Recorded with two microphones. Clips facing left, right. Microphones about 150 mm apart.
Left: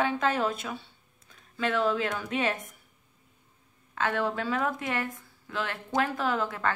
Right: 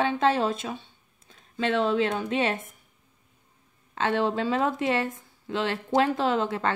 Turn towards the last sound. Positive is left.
turn(degrees=-25)  # may be behind; listen again after turning